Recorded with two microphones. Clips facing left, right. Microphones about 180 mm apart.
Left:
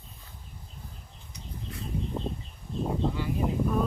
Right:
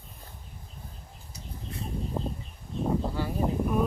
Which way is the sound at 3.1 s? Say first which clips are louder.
Right 1 dB; 40° right (ahead or behind).